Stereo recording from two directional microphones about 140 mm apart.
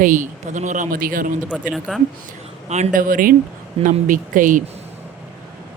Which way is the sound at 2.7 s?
55° right (ahead or behind).